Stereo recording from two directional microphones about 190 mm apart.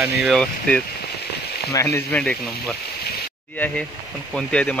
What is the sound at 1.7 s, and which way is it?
Speech, 15° left (ahead or behind).